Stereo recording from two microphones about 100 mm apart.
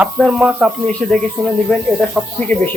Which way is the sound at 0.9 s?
10° left (ahead or behind).